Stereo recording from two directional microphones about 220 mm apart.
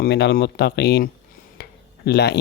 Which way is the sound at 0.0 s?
50° left (ahead or behind).